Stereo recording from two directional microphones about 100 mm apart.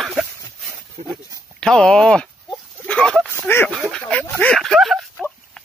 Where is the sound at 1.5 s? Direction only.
10° left (ahead or behind).